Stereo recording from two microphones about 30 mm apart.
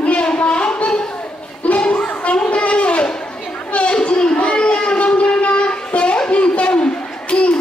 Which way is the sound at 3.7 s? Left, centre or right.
Left.